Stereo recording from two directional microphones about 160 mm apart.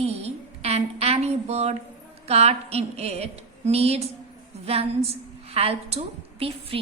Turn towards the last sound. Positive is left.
turn(degrees=-40)  # may be behind; listen again after turning